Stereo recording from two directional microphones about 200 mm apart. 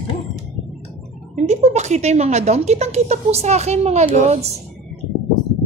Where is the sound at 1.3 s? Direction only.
35° right (ahead or behind).